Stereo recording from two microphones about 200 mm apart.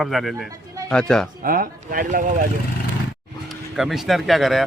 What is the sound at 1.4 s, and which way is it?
Speech, 45° right (ahead or behind).